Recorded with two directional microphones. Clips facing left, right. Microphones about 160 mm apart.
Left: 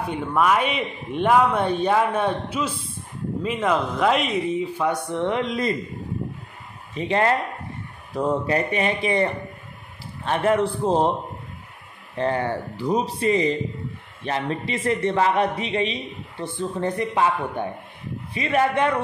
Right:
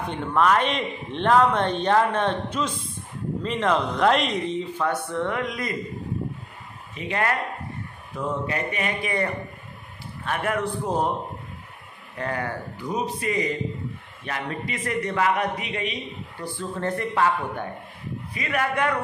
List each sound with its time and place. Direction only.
0.0 s a man's voice: 10° left (ahead or behind); by 5.8 s 25° left (ahead or behind)
7.0 s a man's voice: 30° left (ahead or behind)
12.2 s a man's voice: 25° left (ahead or behind)